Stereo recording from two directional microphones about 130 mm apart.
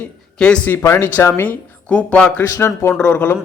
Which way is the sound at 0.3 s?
5° left (ahead or behind).